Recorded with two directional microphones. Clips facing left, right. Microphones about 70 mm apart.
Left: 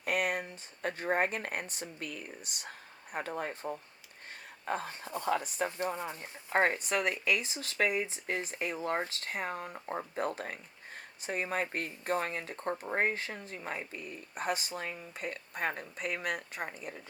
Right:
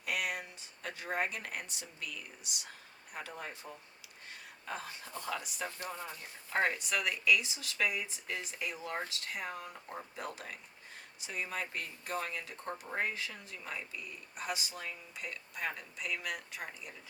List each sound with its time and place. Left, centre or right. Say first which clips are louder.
0.0 s speech: left 5 dB; left